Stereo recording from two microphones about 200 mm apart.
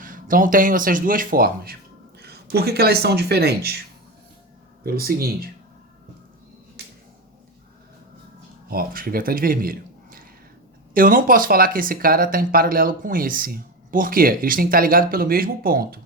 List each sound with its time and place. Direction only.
0.0 s speech: 45° right (ahead or behind)
4.8 s speech: 50° right (ahead or behind)
8.7 s speech: 45° right (ahead or behind)